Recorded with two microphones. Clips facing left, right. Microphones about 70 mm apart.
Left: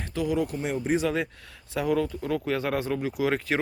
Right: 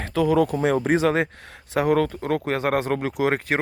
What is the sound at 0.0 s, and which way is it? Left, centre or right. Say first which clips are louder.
Speech: right 7 dB; right.